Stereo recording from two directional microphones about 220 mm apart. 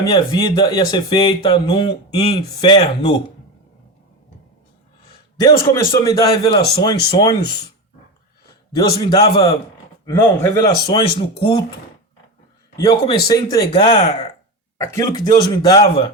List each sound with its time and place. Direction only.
0.0 s speech: 20° left (ahead or behind)
5.4 s a man's voice: 15° left (ahead or behind)
8.7 s a man's voice: 15° left (ahead or behind)
12.7 s a man's voice: 15° left (ahead or behind)
14.9 s a man's voice: 20° left (ahead or behind)